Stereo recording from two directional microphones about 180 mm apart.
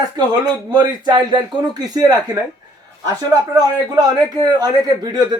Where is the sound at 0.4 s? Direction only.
20° right (ahead or behind).